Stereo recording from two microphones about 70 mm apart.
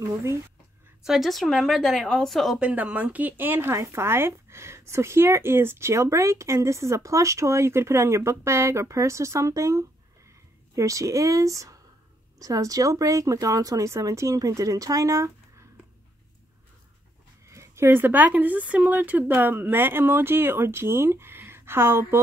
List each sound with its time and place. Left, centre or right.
0.0 s speech: right
1.0 s speech: centre
2.6 s speech: right
17.5 s speech: right